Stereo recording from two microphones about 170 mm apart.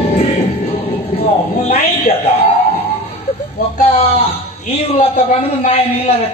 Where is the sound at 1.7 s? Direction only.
35° left (ahead or behind).